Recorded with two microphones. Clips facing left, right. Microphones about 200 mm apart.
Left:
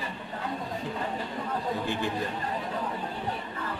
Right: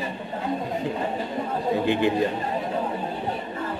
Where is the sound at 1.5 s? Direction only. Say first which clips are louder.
Right 8 dB; 20° right (ahead or behind).